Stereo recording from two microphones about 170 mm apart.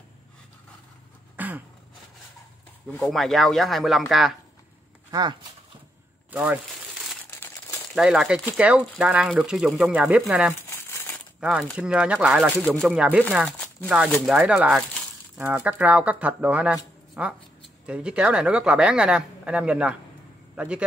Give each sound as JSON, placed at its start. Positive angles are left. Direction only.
{"t": 1.3, "sound": "a sound", "side_deg": -10}
{"t": 3.0, "sound": "speech", "side_deg": 0}
{"t": 5.1, "sound": "speech", "side_deg": -25}
{"t": 6.3, "sound": "speech", "side_deg": -10}
{"t": 7.2, "sound": "crumpling", "side_deg": 15}
{"t": 7.9, "sound": "speech", "side_deg": -5}
{"t": 10.5, "sound": "crumpling", "side_deg": 15}
{"t": 11.3, "sound": "speech", "side_deg": -5}